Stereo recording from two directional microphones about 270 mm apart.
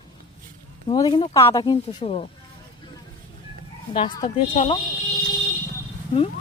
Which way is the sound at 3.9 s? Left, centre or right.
Left.